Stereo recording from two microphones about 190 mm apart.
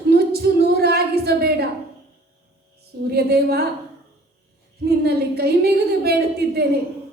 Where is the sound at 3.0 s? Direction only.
55° right (ahead or behind).